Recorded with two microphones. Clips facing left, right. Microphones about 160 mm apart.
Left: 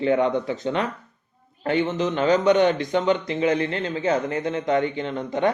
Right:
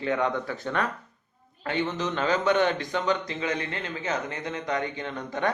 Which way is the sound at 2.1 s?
40° left (ahead or behind).